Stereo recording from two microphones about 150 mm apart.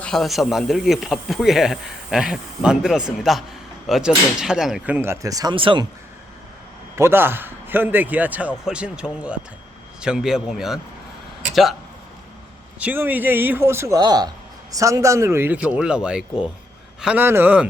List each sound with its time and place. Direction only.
0.0 s speech: centre (ahead or behind)
4.9 s speech: 20° right (ahead or behind)
6.9 s a man's voice: 15° right (ahead or behind)
12.8 s a man's voice: 10° right (ahead or behind)